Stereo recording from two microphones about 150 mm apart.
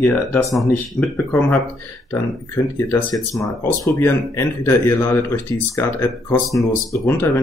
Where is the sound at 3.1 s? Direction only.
Centre (ahead or behind).